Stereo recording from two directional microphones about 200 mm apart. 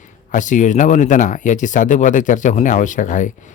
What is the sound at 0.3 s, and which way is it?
Speech, 40° left (ahead or behind).